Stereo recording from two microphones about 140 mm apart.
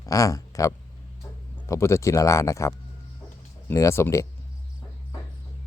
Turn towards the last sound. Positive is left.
turn(degrees=20)  # may be behind; listen again after turning